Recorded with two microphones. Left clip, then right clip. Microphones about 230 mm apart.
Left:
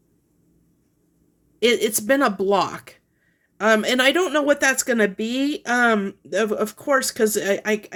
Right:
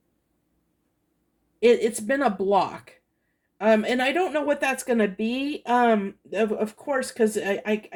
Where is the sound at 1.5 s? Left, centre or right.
Left.